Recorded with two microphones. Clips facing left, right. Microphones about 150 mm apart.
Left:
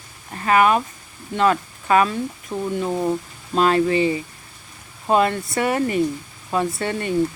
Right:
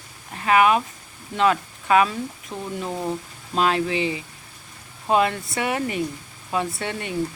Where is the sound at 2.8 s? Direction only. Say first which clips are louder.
Left 5 dB; 10° left (ahead or behind).